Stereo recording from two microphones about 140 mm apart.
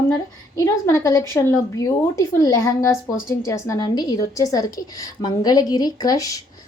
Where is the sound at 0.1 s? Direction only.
25° left (ahead or behind).